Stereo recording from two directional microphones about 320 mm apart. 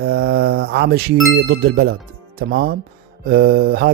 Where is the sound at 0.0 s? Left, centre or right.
Right.